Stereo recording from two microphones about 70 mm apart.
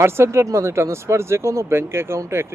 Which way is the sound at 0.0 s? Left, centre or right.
Right.